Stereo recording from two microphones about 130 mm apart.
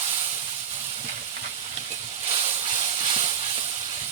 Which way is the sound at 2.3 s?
40° right (ahead or behind).